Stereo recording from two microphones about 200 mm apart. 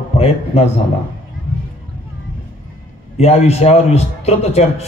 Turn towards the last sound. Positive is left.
turn(degrees=30)  # may be behind; listen again after turning